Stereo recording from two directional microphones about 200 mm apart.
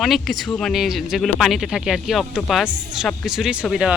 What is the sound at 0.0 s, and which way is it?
Speech, centre (ahead or behind).